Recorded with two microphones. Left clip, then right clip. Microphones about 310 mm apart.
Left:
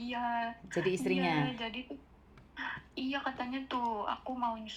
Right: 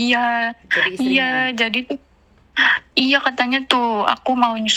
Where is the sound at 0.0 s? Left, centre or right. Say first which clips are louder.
Right 17 dB; right.